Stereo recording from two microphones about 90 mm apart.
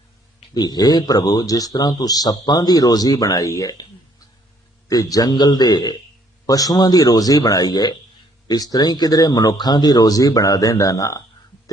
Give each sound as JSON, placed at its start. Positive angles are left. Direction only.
{"t": 0.5, "sound": "a man's voice", "side_deg": 50}
{"t": 4.9, "sound": "a man's voice", "side_deg": 45}